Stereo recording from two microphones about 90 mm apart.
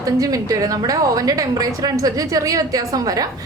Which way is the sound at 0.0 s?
40° right (ahead or behind).